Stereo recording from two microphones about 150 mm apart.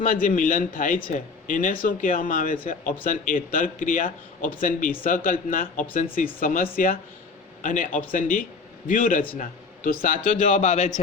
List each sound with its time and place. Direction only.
0.0 s speech: 60° left (ahead or behind)